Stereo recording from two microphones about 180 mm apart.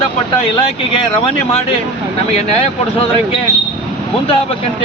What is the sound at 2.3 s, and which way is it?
Speech, 35° left (ahead or behind).